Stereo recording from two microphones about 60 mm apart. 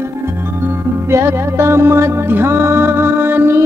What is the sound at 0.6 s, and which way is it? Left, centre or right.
Music, right.